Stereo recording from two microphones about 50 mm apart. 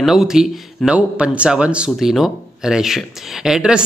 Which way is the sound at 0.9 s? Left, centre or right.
Right.